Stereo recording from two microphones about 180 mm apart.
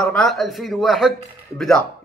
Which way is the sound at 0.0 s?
5° left (ahead or behind).